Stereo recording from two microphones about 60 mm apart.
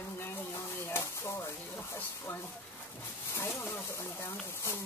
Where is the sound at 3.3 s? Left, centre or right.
Left.